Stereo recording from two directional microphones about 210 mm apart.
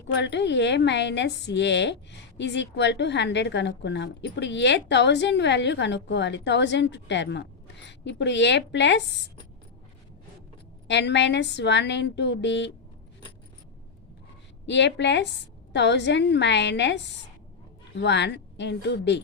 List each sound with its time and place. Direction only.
0.1 s a woman's voice: 55° left (ahead or behind)
10.8 s a woman's voice: 55° left (ahead or behind)
14.7 s a woman's voice: 55° left (ahead or behind)